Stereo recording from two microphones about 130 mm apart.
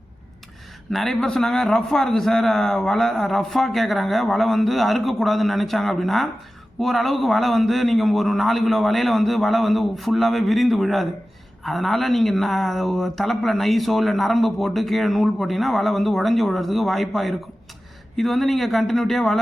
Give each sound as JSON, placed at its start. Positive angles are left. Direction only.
{"t": 0.9, "sound": "a woman's voice", "side_deg": 0}